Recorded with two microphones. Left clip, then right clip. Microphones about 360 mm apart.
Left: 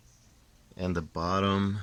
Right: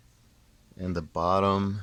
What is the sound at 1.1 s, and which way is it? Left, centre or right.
Speech, centre.